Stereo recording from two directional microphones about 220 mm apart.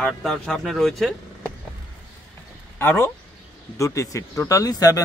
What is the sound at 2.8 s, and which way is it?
Speech, 10° left (ahead or behind).